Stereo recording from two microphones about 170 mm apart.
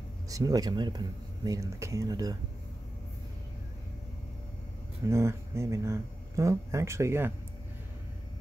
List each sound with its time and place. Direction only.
0.3 s speech: 20° right (ahead or behind)
5.0 s speech: 15° right (ahead or behind)